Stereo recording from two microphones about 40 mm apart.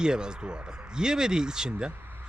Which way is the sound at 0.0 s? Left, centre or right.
Centre.